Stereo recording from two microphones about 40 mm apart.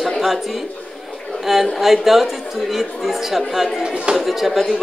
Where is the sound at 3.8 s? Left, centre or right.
Centre.